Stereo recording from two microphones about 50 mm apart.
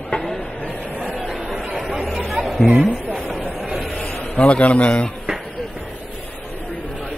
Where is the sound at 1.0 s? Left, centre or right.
Centre.